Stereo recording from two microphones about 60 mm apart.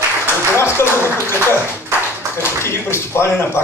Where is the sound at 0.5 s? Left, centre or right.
Left.